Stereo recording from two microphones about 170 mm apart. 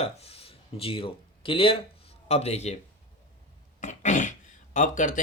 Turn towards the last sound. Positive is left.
turn(degrees=50)  # may be behind; listen again after turning